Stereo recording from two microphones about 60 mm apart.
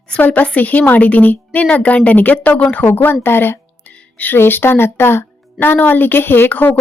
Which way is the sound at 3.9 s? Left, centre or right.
Left.